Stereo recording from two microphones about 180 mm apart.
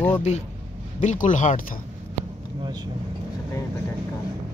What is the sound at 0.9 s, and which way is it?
Speech, 45° left (ahead or behind).